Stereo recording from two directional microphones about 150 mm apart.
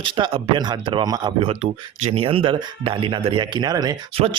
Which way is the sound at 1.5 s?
45° right (ahead or behind).